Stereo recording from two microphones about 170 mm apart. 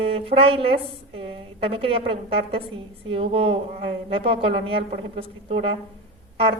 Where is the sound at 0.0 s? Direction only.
35° right (ahead or behind).